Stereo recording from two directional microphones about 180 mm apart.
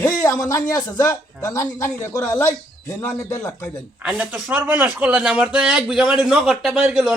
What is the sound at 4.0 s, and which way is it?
A man's voice, 10° right (ahead or behind).